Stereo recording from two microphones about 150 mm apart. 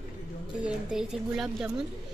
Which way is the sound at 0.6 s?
5° right (ahead or behind).